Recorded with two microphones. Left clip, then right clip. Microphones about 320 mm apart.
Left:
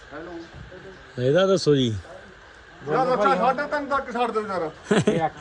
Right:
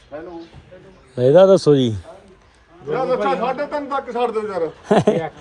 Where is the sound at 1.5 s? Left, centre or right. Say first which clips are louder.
Right 7 dB; centre.